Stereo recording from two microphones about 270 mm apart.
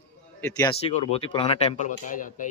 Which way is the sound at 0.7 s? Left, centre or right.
Left.